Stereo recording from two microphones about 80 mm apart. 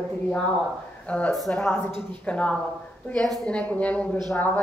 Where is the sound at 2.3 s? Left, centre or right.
Centre.